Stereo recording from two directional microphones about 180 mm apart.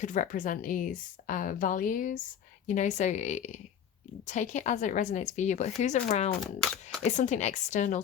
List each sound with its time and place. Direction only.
0.0 s a woman's voice: 45° left (ahead or behind)
6.6 s speech: 5° left (ahead or behind)
7.0 s speech: 40° left (ahead or behind)